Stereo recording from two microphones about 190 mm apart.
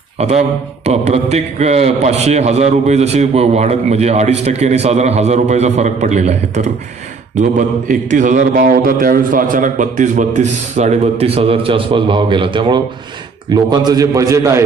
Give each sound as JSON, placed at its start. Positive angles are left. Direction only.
{"t": 0.8, "sound": "a man's voice", "side_deg": -35}